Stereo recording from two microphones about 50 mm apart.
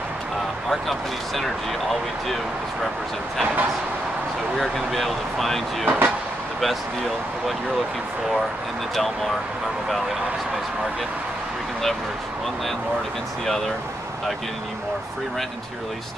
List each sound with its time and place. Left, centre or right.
0.7 s speech: centre
4.6 s speech: centre
5.9 s speech: right
8.9 s speech: centre